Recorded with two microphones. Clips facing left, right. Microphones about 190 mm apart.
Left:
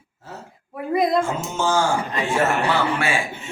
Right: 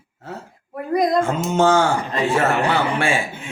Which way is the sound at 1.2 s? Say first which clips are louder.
Right 6 dB; 60° right (ahead or behind).